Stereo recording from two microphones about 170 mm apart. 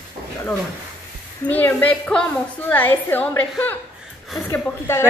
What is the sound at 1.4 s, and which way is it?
A woman's voice, 10° left (ahead or behind).